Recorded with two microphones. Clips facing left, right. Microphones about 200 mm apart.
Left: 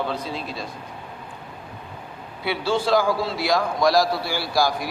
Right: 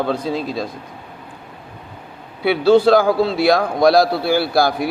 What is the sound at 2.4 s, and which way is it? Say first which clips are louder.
A man's voice: right 11 dB; 65° right (ahead or behind).